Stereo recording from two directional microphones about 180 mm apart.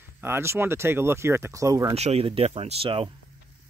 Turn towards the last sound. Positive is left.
turn(degrees=-30)  # may be behind; listen again after turning